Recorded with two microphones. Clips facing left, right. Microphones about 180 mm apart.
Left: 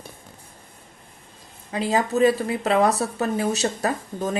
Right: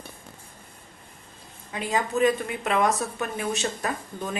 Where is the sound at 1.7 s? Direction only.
35° left (ahead or behind).